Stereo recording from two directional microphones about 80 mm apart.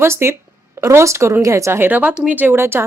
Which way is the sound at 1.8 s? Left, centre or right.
Right.